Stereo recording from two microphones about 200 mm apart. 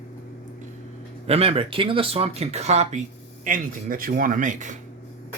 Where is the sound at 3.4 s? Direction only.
45° right (ahead or behind).